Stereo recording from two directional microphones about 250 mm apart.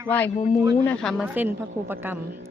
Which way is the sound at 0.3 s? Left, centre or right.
Left.